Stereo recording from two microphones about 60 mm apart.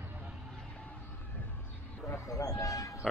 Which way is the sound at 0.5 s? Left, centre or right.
Centre.